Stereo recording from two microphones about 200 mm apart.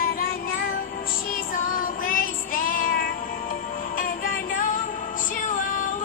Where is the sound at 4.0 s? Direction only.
45° left (ahead or behind).